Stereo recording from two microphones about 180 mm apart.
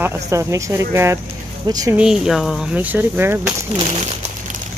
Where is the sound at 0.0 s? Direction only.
15° right (ahead or behind).